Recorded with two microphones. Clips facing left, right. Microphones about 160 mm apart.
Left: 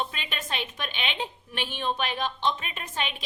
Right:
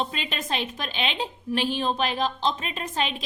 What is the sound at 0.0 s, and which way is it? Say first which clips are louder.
A woman's voice: right 4 dB; 35° right (ahead or behind).